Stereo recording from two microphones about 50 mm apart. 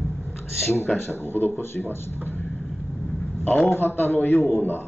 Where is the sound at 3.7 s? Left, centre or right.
Left.